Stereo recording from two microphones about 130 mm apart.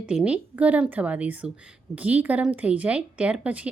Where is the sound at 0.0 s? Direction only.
5° right (ahead or behind).